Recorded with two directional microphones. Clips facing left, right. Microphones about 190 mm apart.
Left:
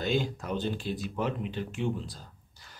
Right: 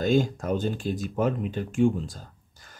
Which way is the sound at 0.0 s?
45° right (ahead or behind).